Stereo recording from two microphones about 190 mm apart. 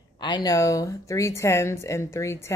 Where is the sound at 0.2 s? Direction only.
20° left (ahead or behind).